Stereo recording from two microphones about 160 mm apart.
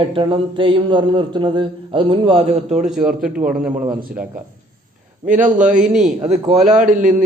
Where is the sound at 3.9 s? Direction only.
65° right (ahead or behind).